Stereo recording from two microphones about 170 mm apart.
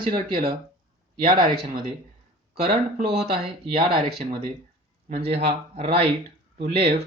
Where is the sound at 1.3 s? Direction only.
30° right (ahead or behind).